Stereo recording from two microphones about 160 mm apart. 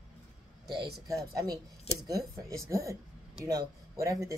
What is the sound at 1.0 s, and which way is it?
Speech, 20° right (ahead or behind).